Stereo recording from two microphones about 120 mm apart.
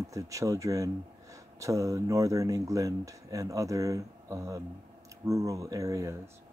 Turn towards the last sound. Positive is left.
turn(degrees=-25)  # may be behind; listen again after turning